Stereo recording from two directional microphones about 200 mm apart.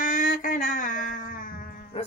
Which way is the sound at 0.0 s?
40° left (ahead or behind).